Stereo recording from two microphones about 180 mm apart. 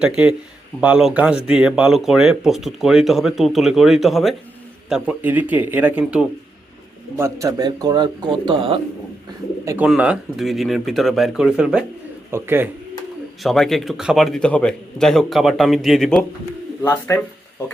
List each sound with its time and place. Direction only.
0.0 s speech: 5° right (ahead or behind)
7.2 s speech: 15° right (ahead or behind)
9.6 s speech: 5° right (ahead or behind)
13.4 s speech: centre (ahead or behind)
16.8 s speech: 15° left (ahead or behind)